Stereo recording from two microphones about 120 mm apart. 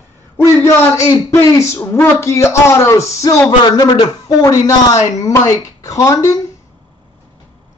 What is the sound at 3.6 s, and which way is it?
A man's voice, 35° left (ahead or behind).